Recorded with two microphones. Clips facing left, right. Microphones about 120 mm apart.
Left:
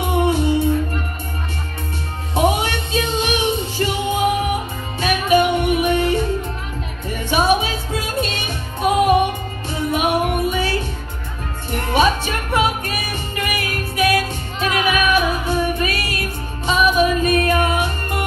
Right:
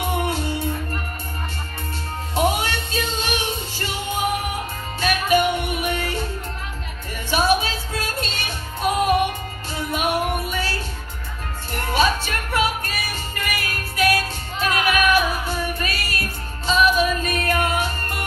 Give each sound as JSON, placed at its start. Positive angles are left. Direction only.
{"t": 0.1, "sound": "music", "side_deg": 15}
{"t": 2.3, "sound": "music", "side_deg": 15}
{"t": 7.2, "sound": "music", "side_deg": 15}
{"t": 11.9, "sound": "music", "side_deg": 20}